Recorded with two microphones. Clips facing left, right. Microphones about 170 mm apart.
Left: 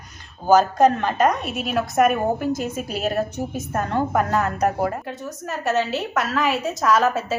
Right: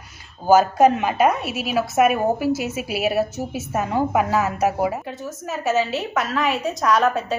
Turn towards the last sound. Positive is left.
turn(degrees=0)  # may be behind; listen again after turning